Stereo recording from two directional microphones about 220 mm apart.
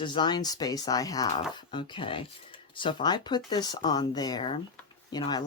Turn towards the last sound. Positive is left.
turn(degrees=20)  # may be behind; listen again after turning